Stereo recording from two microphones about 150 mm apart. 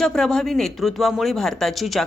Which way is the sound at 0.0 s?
5° left (ahead or behind).